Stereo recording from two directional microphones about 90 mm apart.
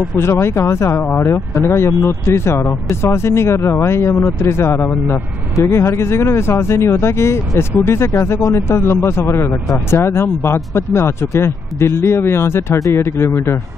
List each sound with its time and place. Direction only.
0.2 s speech: 30° left (ahead or behind)